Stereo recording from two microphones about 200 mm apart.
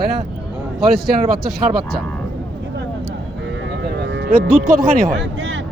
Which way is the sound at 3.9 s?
60° right (ahead or behind).